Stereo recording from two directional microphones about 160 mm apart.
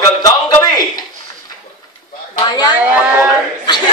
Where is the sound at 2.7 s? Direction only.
10° right (ahead or behind).